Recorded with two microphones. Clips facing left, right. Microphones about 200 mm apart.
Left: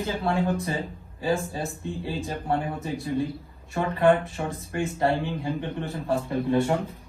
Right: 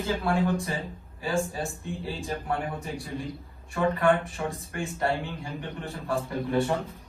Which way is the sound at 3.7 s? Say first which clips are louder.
Left 2 dB; 30° left (ahead or behind).